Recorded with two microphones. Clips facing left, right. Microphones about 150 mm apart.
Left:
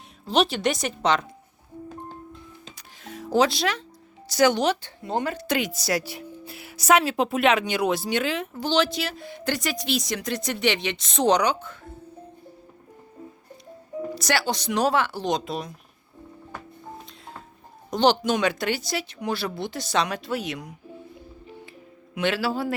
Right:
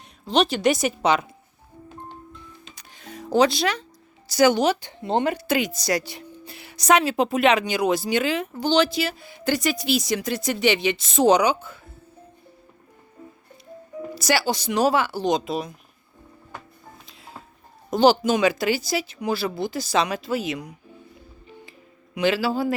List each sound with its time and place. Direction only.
0.3 s speech: centre (ahead or behind)
2.7 s music: centre (ahead or behind)
4.3 s speech: centre (ahead or behind)
4.8 s speech: 20° right (ahead or behind)
5.3 s speech: 5° right (ahead or behind)
14.2 s speech: 5° right (ahead or behind)
17.1 s music: 5° right (ahead or behind)
17.9 s speech: 5° right (ahead or behind)
21.4 s music: centre (ahead or behind)